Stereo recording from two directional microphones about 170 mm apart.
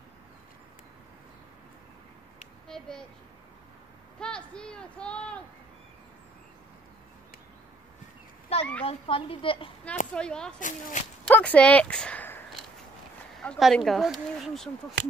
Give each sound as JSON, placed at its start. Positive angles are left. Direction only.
{"t": 2.7, "sound": "speech", "side_deg": 5}
{"t": 4.2, "sound": "speech", "side_deg": 5}
{"t": 8.5, "sound": "a sound", "side_deg": 35}
{"t": 8.8, "sound": "speech", "side_deg": 30}
{"t": 10.1, "sound": "speech", "side_deg": 5}
{"t": 10.6, "sound": "speech", "side_deg": 45}
{"t": 11.2, "sound": "speech", "side_deg": 10}